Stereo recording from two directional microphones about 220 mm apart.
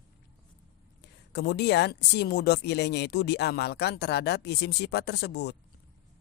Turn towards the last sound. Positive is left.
turn(degrees=50)  # may be behind; listen again after turning